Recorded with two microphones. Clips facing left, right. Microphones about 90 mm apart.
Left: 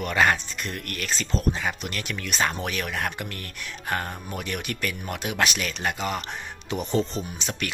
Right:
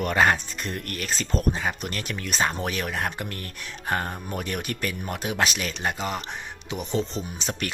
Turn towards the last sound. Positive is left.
turn(degrees=-35)  # may be behind; listen again after turning